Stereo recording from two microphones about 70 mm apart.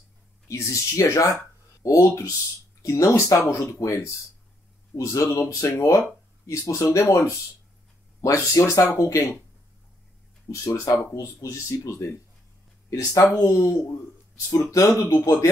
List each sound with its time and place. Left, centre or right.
0.5 s speech: left
8.2 s speech: left
10.5 s speech: left
13.1 s speech: left